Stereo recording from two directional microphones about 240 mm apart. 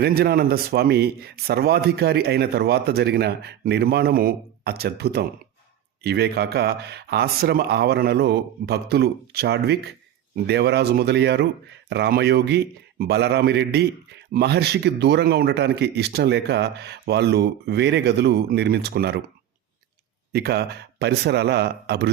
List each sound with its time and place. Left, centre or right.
0.0 s speech: right
20.3 s speech: right